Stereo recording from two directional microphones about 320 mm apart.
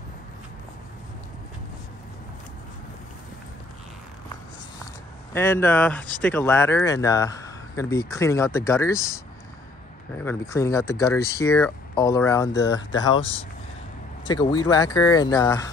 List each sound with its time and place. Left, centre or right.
5.3 s speech: centre
10.1 s speech: centre